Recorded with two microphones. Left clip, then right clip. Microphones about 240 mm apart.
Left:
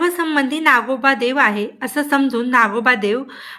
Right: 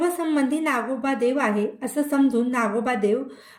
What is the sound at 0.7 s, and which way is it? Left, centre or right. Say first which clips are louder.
A woman's voice: left 10 dB; centre.